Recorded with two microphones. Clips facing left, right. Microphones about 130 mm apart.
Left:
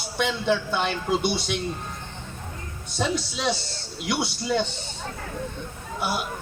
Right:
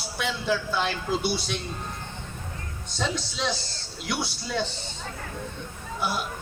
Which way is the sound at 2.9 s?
5° left (ahead or behind).